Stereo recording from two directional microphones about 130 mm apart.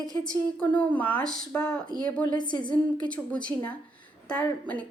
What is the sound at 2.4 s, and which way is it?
Speech, 35° left (ahead or behind).